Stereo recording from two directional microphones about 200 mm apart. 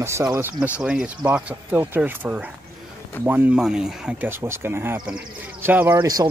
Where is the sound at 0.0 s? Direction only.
15° right (ahead or behind).